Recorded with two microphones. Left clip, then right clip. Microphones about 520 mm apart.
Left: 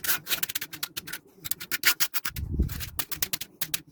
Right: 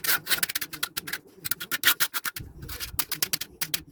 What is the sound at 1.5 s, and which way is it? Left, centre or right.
Scratch, centre.